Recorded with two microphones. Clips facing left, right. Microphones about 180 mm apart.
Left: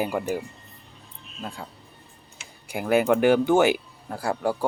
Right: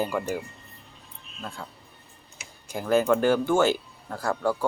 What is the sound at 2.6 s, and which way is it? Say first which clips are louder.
Speech: left 1 dB; 15° left (ahead or behind).